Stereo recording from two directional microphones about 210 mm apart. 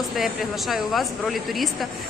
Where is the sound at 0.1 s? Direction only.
Centre (ahead or behind).